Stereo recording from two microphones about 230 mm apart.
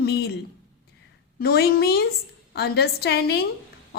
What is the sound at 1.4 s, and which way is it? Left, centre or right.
A woman's voice, left.